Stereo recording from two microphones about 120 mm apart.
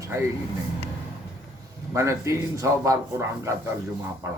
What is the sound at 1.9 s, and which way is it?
Speech, 25° right (ahead or behind).